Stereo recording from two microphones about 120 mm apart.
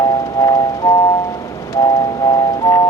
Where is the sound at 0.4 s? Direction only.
25° left (ahead or behind).